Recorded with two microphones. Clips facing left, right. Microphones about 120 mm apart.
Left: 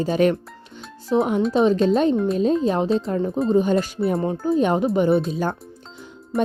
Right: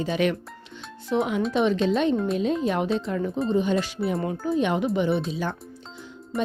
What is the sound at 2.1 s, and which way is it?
Speech, 5° left (ahead or behind).